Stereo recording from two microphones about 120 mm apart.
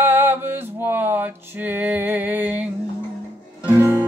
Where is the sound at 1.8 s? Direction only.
15° right (ahead or behind).